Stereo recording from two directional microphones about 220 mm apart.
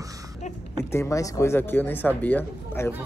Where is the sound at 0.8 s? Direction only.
10° left (ahead or behind).